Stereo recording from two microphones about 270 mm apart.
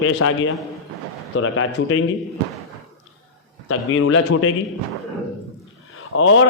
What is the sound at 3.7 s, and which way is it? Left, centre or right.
Speech, left.